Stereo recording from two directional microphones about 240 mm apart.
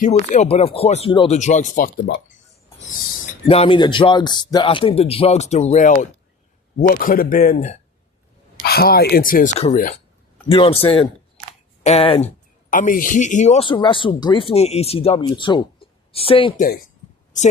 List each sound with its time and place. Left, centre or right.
0.0 s speech: left
3.4 s speech: left
16.6 s speech: left